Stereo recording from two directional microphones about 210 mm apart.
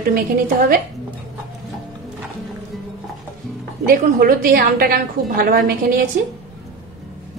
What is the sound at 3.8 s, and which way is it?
A woman's voice, 40° right (ahead or behind).